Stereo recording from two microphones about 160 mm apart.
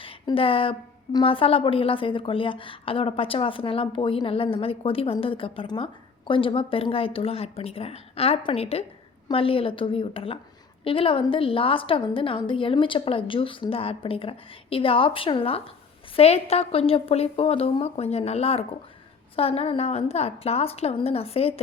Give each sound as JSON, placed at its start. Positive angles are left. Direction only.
{"t": 0.0, "sound": "a woman's voice", "side_deg": 35}